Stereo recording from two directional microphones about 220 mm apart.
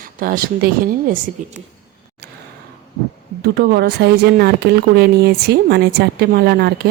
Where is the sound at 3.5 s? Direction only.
45° right (ahead or behind).